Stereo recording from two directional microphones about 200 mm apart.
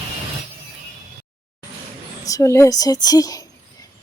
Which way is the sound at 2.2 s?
15° left (ahead or behind).